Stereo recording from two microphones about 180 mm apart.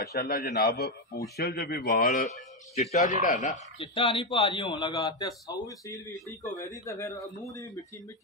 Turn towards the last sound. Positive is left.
turn(degrees=20)  # may be behind; listen again after turning